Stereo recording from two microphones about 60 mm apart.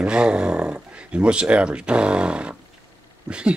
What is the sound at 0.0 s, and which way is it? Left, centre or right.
Speech, centre.